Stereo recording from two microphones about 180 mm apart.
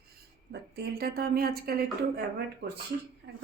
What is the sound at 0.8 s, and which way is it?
Speech, 60° right (ahead or behind).